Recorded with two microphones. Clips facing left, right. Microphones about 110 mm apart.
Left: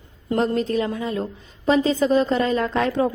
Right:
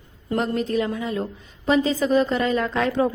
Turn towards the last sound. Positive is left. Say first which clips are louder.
# left 1 dB
turn(degrees=35)  # may be behind; listen again after turning